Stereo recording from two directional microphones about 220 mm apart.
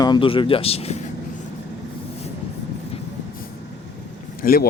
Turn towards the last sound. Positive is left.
turn(degrees=40)  # may be behind; listen again after turning